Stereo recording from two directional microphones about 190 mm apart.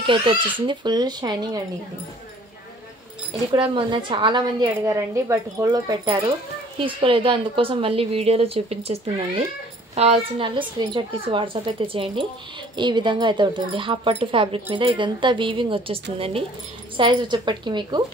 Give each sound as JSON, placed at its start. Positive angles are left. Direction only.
{"t": 0.0, "sound": "a woman's voice", "side_deg": -25}
{"t": 3.5, "sound": "a woman's voice", "side_deg": -25}